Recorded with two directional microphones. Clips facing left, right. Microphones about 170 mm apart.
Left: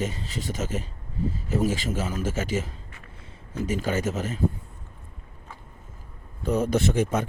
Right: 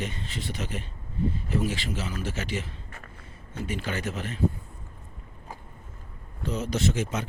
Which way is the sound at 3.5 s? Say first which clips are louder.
Left 6 dB; 40° left (ahead or behind).